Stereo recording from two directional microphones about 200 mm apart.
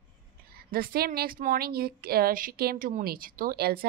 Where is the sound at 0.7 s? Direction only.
45° right (ahead or behind).